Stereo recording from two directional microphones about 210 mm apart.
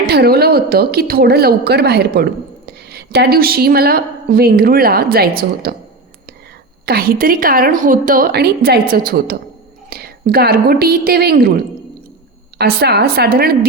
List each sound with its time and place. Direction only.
0.1 s a woman's voice: 50° right (ahead or behind)
6.8 s a woman's voice: 45° right (ahead or behind)